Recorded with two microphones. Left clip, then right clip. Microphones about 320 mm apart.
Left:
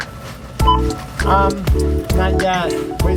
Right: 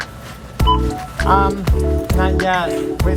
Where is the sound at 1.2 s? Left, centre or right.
Centre.